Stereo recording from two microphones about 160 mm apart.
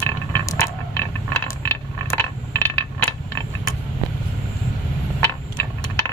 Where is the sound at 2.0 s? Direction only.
15° left (ahead or behind).